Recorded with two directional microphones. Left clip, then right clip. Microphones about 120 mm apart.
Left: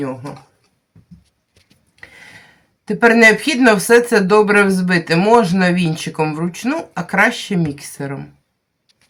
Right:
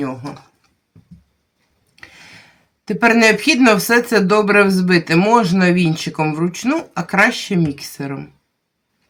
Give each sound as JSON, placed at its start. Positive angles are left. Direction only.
{"t": 0.2, "sound": "speech", "side_deg": -40}
{"t": 2.0, "sound": "speech", "side_deg": -20}